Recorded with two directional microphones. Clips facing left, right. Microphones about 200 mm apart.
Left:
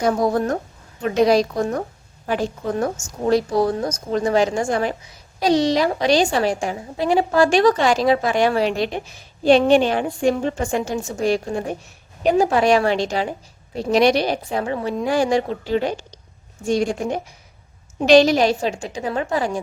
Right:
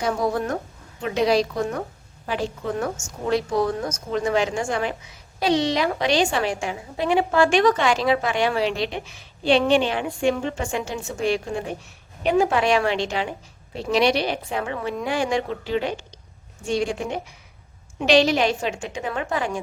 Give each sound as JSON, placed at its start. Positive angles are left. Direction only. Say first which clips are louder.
{"t": 0.0, "sound": "a woman's voice", "louder": "left 5 dB", "side_deg": 40}